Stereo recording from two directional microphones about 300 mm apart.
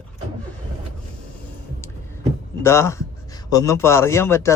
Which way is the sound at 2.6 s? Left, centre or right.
Centre.